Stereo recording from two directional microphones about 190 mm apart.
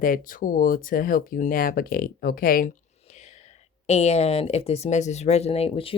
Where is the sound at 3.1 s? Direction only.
35° left (ahead or behind).